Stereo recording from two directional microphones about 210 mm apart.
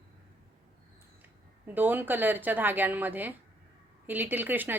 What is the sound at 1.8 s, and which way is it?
Speech, 10° right (ahead or behind).